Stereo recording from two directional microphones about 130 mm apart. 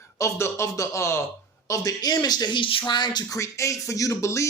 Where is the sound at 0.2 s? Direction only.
20° left (ahead or behind).